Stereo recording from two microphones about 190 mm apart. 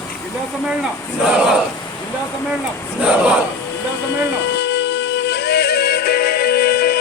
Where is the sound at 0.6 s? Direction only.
Centre (ahead or behind).